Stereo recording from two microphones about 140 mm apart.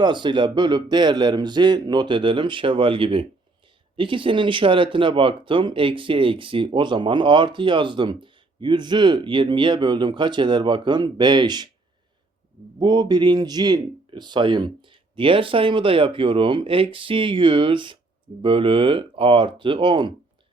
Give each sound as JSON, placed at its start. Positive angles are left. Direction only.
{"t": 0.0, "sound": "speech", "side_deg": -35}
{"t": 12.8, "sound": "speech", "side_deg": -30}